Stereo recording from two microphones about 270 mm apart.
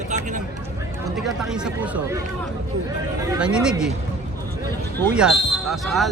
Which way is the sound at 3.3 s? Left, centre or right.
Centre.